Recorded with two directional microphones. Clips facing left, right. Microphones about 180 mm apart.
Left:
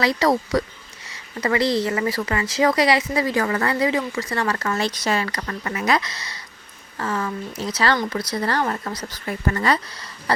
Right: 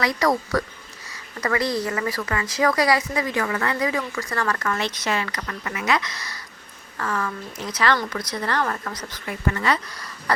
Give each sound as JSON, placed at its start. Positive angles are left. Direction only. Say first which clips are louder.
{"t": 0.0, "sound": "speech", "louder": "left 2 dB", "side_deg": 30}